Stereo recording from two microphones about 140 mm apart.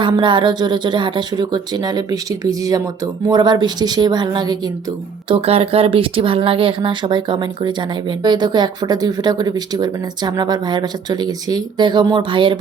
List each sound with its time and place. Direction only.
0.0 s speech: 35° right (ahead or behind)
5.3 s speech: 45° right (ahead or behind)